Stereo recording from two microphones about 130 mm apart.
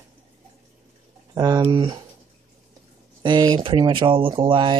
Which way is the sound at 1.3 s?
30° right (ahead or behind).